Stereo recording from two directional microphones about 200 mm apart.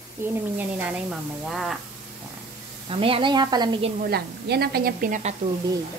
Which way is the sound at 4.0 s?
50° right (ahead or behind).